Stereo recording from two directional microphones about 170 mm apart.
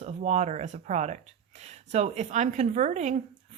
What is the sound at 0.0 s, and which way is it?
Speech, 40° right (ahead or behind).